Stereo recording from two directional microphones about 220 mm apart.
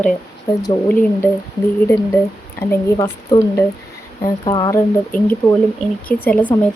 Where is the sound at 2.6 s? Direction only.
15° left (ahead or behind).